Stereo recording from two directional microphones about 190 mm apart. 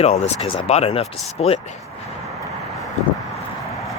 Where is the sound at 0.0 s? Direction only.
35° left (ahead or behind).